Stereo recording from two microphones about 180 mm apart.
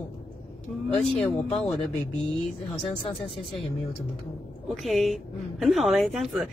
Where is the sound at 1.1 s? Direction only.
35° left (ahead or behind).